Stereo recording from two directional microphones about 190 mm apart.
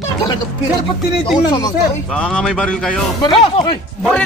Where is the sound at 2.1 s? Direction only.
5° left (ahead or behind).